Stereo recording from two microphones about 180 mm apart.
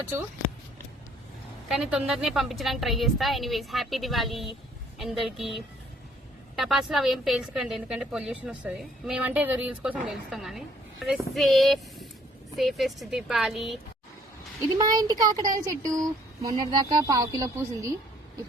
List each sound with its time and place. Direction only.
1.6 s a woman's voice: 5° right (ahead or behind)
14.8 s speech: 20° right (ahead or behind)